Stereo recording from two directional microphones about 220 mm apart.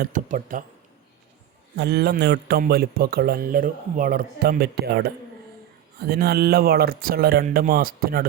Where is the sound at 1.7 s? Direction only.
45° right (ahead or behind).